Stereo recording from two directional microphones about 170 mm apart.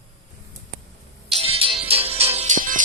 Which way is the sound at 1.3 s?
35° right (ahead or behind).